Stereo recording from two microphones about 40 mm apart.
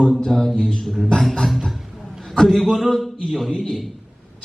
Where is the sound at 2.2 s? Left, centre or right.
Centre.